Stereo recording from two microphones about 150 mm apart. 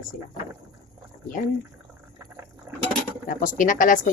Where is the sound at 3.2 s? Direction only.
60° left (ahead or behind).